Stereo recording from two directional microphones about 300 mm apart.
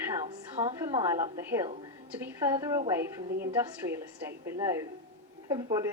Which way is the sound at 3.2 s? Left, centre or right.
Right.